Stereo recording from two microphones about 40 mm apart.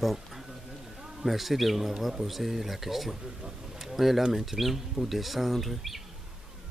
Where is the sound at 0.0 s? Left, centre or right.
Centre.